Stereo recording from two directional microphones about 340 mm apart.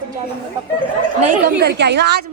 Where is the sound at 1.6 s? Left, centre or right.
Right.